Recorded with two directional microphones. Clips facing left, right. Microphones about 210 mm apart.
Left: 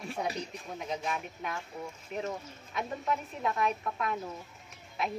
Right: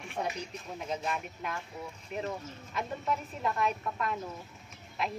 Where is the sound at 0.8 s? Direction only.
Centre (ahead or behind).